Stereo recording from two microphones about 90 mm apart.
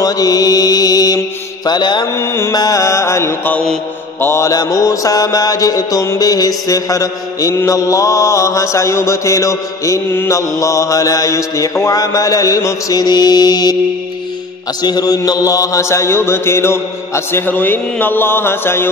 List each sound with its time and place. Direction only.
0.0 s mantra: 45° left (ahead or behind)
1.7 s mantra: 55° left (ahead or behind)
2.1 s mantra: 30° left (ahead or behind)
2.5 s mantra: 45° left (ahead or behind); by 4.5 s 30° left (ahead or behind)
4.5 s mantra: 45° left (ahead or behind)
14.8 s mantra: 50° left (ahead or behind); by 18.9 s 25° left (ahead or behind)